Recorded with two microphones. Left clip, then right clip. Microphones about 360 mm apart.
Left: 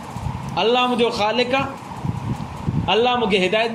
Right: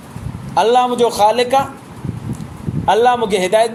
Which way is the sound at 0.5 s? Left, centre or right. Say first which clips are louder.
Right 5 dB; right.